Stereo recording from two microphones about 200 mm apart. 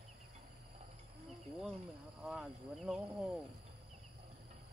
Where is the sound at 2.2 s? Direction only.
5° right (ahead or behind).